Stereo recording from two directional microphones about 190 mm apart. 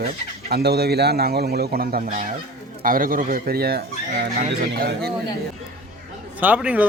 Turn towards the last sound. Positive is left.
turn(degrees=-10)  # may be behind; listen again after turning